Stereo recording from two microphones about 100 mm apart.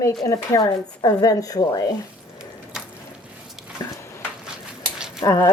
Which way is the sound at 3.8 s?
40° left (ahead or behind).